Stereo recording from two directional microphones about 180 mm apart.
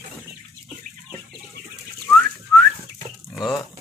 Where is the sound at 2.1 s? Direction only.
Centre (ahead or behind).